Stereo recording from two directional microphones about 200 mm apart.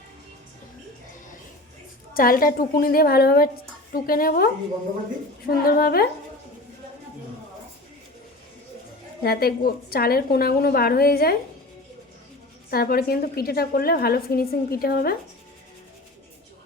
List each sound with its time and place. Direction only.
2.1 s a woman's voice: 45° left (ahead or behind)
9.2 s a woman's voice: 50° left (ahead or behind)
12.7 s a woman's voice: 50° left (ahead or behind)